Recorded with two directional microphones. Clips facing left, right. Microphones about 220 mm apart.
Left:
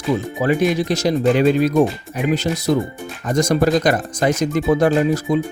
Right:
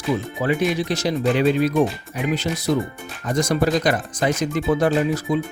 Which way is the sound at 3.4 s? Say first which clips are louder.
Left 4 dB; 45° left (ahead or behind).